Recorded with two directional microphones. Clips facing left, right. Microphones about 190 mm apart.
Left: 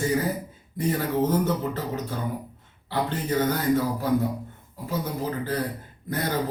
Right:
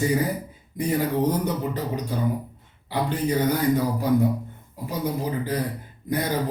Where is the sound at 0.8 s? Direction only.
15° right (ahead or behind).